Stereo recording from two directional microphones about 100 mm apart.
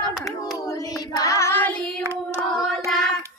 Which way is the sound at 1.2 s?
35° left (ahead or behind).